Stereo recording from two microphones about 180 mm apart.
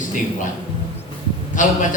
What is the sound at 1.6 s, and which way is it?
Speech, 45° left (ahead or behind).